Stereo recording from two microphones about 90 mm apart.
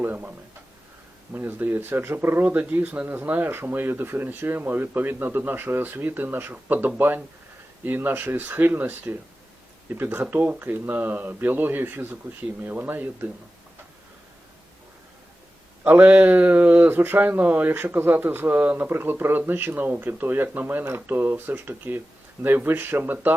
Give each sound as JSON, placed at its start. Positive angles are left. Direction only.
{"t": 0.0, "sound": "speech", "side_deg": -20}
{"t": 15.8, "sound": "speech", "side_deg": -20}